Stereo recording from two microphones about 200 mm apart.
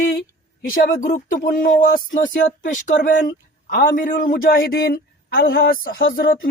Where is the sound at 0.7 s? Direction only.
45° left (ahead or behind).